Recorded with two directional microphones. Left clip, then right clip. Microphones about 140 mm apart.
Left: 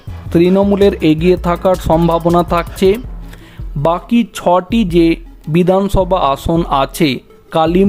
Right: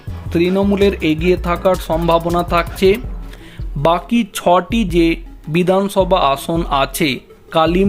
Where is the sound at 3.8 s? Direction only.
30° left (ahead or behind).